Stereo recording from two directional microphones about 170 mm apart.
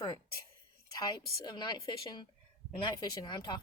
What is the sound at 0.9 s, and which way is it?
Speech, 25° left (ahead or behind).